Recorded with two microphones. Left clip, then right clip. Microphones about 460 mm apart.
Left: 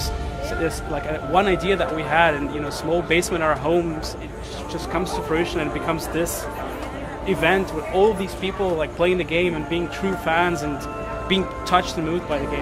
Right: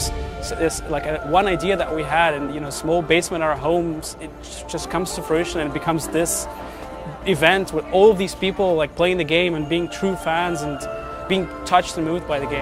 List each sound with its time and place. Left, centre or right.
0.6 s a man's voice: right
4.7 s speech: right
7.3 s speech: right